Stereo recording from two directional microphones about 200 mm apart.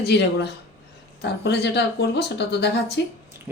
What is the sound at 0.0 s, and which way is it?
Speech, 55° left (ahead or behind).